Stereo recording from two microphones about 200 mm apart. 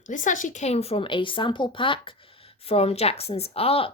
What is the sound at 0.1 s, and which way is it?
A woman's voice, 40° left (ahead or behind).